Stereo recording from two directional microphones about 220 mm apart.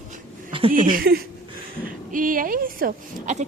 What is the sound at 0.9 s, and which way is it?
A woman's voice, 45° right (ahead or behind).